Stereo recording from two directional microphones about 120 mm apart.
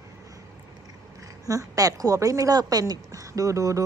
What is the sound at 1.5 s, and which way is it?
A woman's voice, 30° right (ahead or behind).